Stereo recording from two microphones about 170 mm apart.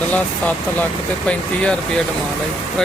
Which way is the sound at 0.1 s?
10° left (ahead or behind).